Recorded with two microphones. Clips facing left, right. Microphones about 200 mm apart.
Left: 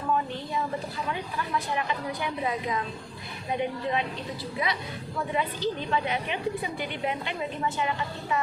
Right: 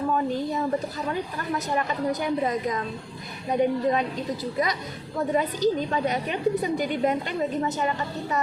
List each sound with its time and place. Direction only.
0.1 s a woman's voice: 40° right (ahead or behind)